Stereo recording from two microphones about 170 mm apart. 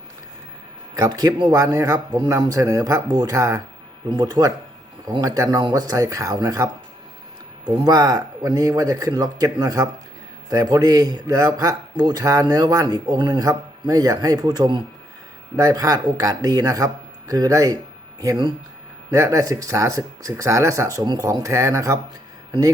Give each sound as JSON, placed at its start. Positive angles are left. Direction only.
{"t": 0.9, "sound": "a man's voice", "side_deg": -20}